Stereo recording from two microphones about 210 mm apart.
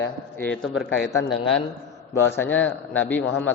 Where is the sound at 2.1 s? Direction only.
10° left (ahead or behind).